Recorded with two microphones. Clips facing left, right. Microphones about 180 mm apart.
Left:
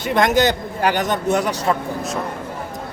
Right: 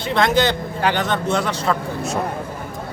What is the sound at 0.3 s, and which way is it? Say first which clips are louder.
Speech: left 1 dB; 45° left (ahead or behind).